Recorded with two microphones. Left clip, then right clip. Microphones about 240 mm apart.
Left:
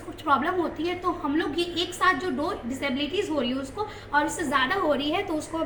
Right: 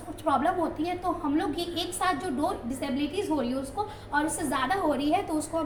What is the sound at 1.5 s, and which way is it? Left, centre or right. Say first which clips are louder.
Speech: left 4 dB; centre.